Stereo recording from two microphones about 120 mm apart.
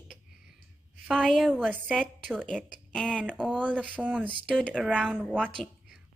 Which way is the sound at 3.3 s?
10° right (ahead or behind).